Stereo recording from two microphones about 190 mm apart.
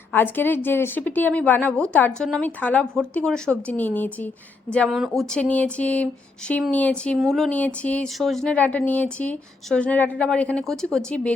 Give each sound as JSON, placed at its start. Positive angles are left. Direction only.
{"t": 0.1, "sound": "a woman's voice", "side_deg": 10}